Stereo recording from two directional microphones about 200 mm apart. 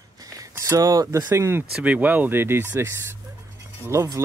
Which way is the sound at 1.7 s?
5° right (ahead or behind).